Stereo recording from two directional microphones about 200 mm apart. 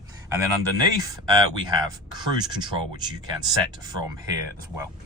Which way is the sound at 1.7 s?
20° right (ahead or behind).